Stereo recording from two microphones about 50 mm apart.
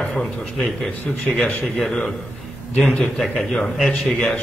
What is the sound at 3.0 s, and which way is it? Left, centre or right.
A man's voice, centre.